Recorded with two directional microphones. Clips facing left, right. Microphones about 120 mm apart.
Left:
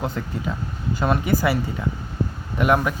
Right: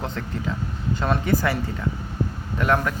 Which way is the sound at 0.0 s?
10° left (ahead or behind).